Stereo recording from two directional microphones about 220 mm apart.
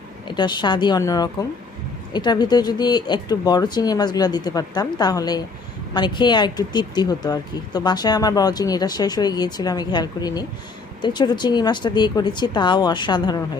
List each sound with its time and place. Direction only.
0.3 s speech: 20° left (ahead or behind)